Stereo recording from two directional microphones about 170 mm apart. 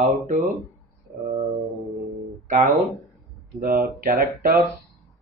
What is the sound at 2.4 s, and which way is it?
Speech, 50° right (ahead or behind).